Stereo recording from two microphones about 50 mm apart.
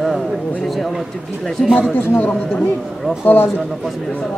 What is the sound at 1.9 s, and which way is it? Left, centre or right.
A man's voice, left.